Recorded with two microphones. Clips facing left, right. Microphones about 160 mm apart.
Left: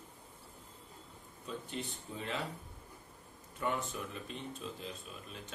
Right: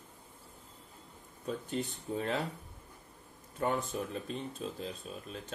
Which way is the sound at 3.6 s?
40° right (ahead or behind).